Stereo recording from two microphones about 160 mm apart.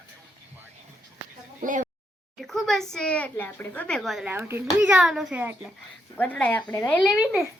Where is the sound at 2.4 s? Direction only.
Centre (ahead or behind).